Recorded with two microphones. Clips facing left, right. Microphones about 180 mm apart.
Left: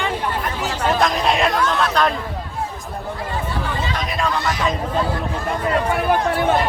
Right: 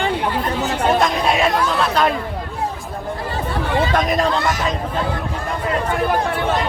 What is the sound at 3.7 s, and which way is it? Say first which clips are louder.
Chatter: right 7 dB; 65° right (ahead or behind).